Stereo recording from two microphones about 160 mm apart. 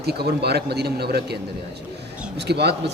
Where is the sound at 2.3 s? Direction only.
90° right.